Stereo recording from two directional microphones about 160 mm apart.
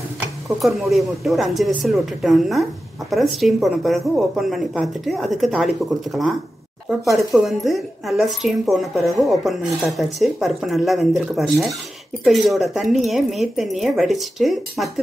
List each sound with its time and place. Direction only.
0.6 s a woman's voice: centre (ahead or behind)
6.9 s a woman's voice: centre (ahead or behind)